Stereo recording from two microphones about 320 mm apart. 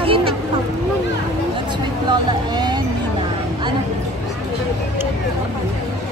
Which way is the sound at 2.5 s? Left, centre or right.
Centre.